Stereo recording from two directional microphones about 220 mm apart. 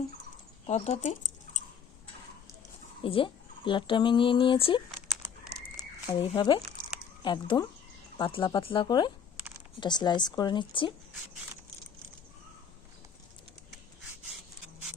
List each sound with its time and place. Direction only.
0.7 s speech: 35° left (ahead or behind)
3.0 s speech: 25° left (ahead or behind)
5.7 s a sound: 20° left (ahead or behind)
7.2 s speech: 20° left (ahead or behind)